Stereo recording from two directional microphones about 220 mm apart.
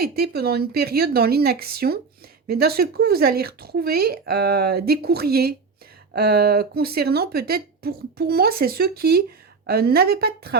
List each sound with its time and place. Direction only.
0.0 s speech: 45° right (ahead or behind)